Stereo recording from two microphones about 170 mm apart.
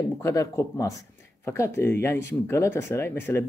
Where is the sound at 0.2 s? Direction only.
15° left (ahead or behind).